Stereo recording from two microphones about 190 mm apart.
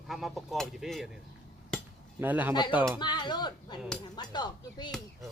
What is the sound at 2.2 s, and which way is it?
Speech, 10° right (ahead or behind).